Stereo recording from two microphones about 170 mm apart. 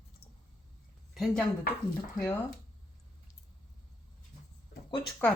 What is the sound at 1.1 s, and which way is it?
A woman's voice, centre (ahead or behind).